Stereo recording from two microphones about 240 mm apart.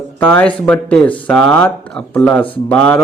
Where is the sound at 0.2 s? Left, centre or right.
Centre.